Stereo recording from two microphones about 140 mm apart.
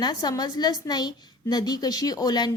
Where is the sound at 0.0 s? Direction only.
30° left (ahead or behind).